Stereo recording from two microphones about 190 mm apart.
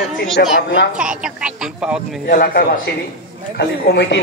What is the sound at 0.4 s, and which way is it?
Speech, 55° left (ahead or behind).